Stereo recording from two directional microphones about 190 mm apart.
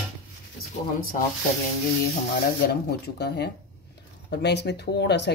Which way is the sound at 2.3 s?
55° left (ahead or behind).